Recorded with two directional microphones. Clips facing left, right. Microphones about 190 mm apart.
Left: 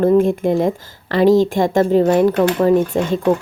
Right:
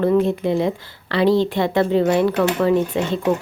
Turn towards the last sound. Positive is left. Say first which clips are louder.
# left 3 dB
turn(degrees=45)  # may be behind; listen again after turning